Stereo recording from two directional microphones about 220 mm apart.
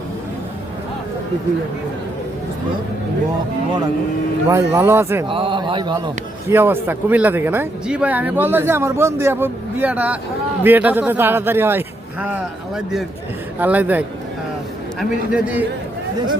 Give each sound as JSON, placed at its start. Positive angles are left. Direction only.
{"t": 4.4, "sound": "speech", "side_deg": -15}
{"t": 5.3, "sound": "speech", "side_deg": -20}
{"t": 6.5, "sound": "a man's voice", "side_deg": -10}